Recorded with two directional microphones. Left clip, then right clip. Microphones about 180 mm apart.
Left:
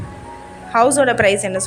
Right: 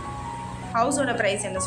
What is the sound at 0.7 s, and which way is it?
Speech, 40° left (ahead or behind).